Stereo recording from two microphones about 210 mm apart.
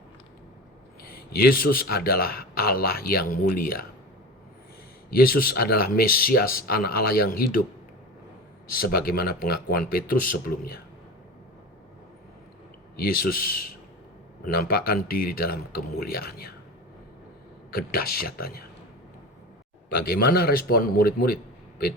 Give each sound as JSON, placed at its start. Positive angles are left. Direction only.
{"t": 1.0, "sound": "a man's voice", "side_deg": 45}
{"t": 5.1, "sound": "a man's voice", "side_deg": 45}
{"t": 8.7, "sound": "a man's voice", "side_deg": 45}
{"t": 13.0, "sound": "a man's voice", "side_deg": 45}
{"t": 17.7, "sound": "a man's voice", "side_deg": 45}
{"t": 19.9, "sound": "a man's voice", "side_deg": 45}